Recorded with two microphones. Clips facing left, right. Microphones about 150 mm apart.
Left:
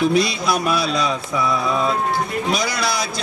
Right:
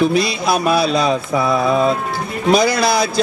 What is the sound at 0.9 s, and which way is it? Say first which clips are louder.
Speech: right 5 dB; 55° right (ahead or behind).